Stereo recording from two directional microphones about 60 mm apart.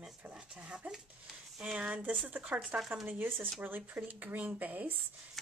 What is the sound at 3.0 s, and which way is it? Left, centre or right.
Speech, right.